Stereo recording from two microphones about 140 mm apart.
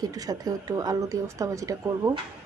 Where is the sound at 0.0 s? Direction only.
25° right (ahead or behind).